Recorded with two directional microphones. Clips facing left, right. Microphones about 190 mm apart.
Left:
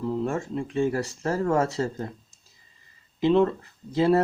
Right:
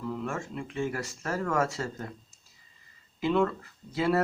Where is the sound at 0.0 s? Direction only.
30° left (ahead or behind).